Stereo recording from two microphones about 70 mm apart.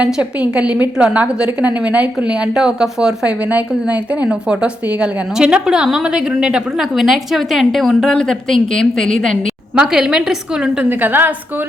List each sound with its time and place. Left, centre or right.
0.0 s a woman's voice: centre
9.7 s a woman's voice: centre
10.8 s a woman's voice: right